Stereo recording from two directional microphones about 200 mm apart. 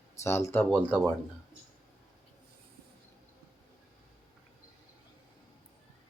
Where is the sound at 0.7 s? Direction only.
Centre (ahead or behind).